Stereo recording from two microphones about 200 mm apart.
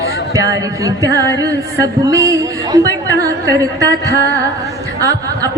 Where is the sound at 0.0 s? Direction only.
15° right (ahead or behind).